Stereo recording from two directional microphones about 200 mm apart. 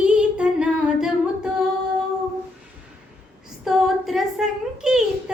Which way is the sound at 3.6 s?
Centre (ahead or behind).